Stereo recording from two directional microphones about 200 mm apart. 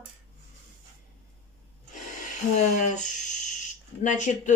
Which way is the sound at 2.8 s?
40° left (ahead or behind).